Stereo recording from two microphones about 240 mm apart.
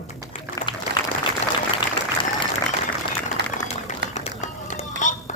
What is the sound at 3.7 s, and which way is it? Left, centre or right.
Run, left.